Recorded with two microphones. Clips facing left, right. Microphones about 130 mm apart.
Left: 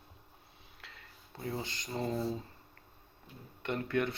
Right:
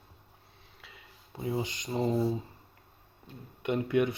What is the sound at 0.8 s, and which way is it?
Speech, 10° right (ahead or behind).